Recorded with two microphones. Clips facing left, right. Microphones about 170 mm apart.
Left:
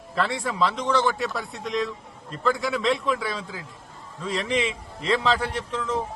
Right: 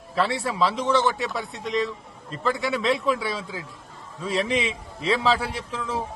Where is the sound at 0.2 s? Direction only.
5° right (ahead or behind).